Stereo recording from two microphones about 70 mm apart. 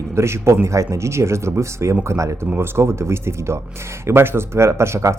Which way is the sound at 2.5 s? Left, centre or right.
Right.